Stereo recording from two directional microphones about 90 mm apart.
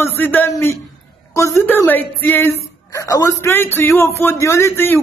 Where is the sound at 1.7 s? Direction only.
20° left (ahead or behind).